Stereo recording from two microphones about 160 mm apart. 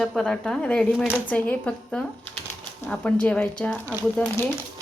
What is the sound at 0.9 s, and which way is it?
Speech, 5° right (ahead or behind).